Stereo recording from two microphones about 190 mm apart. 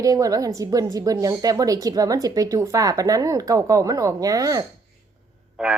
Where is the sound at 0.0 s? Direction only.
20° right (ahead or behind).